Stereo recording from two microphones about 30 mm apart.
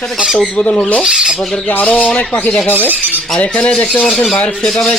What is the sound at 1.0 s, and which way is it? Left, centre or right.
Speech, right.